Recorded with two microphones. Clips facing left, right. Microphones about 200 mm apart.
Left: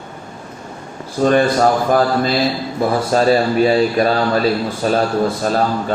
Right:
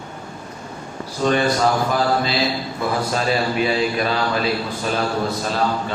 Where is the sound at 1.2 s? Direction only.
50° left (ahead or behind).